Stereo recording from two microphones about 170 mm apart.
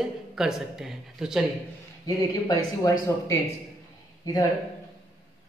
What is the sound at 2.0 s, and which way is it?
A man's voice, 20° left (ahead or behind).